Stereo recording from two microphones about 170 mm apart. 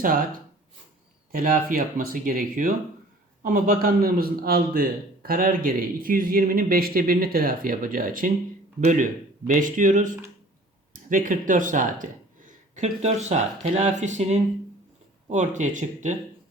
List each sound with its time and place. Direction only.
0.0 s speech: 55° right (ahead or behind)
1.3 s a man's voice: 55° right (ahead or behind)